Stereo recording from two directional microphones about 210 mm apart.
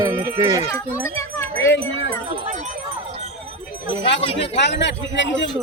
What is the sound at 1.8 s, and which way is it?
Speech, 25° right (ahead or behind).